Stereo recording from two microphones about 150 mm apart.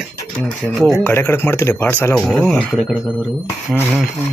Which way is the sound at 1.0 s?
15° left (ahead or behind).